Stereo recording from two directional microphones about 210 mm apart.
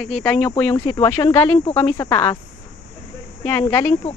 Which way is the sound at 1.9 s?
10° left (ahead or behind).